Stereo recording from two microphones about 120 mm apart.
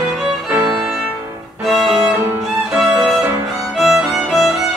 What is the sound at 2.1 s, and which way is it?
Music, 15° right (ahead or behind).